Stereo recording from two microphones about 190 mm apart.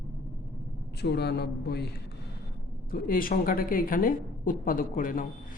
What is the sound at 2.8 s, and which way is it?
A woman's voice, 45° left (ahead or behind).